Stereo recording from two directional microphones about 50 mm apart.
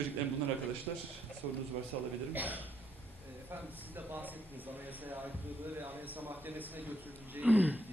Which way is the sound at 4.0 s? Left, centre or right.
Right.